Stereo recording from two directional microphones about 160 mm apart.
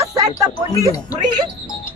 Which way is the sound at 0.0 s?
20° right (ahead or behind).